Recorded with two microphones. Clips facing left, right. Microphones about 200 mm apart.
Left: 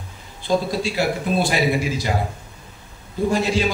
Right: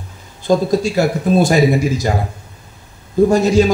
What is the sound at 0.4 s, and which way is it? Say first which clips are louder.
A man's voice: right 7 dB; 45° right (ahead or behind).